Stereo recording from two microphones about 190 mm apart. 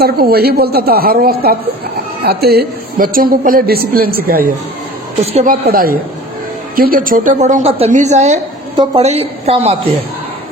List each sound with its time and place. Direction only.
0.0 s a woman's voice: 55° right (ahead or behind)
5.2 s a woman's voice: 30° right (ahead or behind)
5.5 s a woman's voice: 50° right (ahead or behind); by 9.7 s 35° right (ahead or behind)